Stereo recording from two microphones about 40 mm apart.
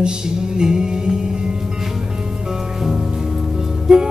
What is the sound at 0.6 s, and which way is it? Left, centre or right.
Music, centre.